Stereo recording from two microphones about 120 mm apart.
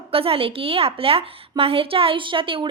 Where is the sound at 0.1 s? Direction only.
50° right (ahead or behind).